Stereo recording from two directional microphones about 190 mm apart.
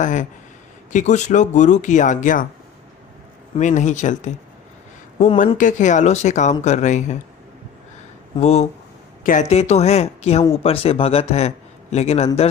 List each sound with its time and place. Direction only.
0.0 s a man's voice: 40° left (ahead or behind)
3.6 s a man's voice: 40° left (ahead or behind)
5.5 s a man's voice: 40° left (ahead or behind)
8.4 s a man's voice: 35° left (ahead or behind)